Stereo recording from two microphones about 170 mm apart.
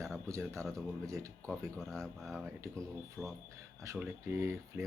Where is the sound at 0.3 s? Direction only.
15° right (ahead or behind).